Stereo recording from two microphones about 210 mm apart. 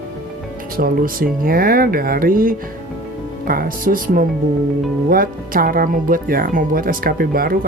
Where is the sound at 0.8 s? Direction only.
40° right (ahead or behind).